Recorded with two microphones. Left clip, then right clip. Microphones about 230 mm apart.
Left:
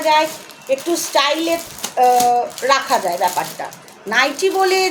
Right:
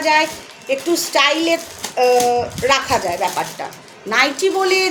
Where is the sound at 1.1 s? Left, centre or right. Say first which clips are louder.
Right 1 dB; centre.